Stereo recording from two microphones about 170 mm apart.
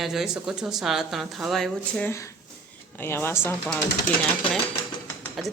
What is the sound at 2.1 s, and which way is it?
Speech, 15° left (ahead or behind).